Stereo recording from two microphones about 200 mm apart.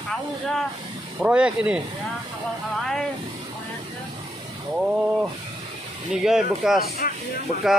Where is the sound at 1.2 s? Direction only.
5° right (ahead or behind).